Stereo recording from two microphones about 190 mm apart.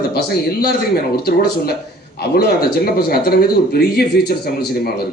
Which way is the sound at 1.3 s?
55° left (ahead or behind).